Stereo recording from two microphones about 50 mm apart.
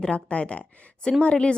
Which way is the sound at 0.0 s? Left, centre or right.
Left.